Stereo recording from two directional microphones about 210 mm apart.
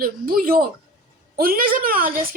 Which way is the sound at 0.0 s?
45° right (ahead or behind).